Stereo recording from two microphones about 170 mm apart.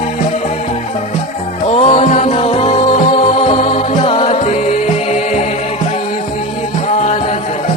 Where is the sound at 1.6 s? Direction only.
40° left (ahead or behind).